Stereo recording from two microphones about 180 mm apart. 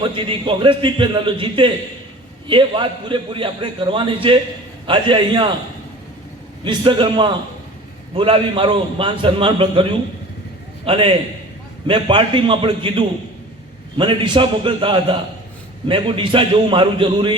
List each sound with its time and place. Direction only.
0.0 s a man's voice: 30° right (ahead or behind)
6.7 s a man's voice: 25° right (ahead or behind)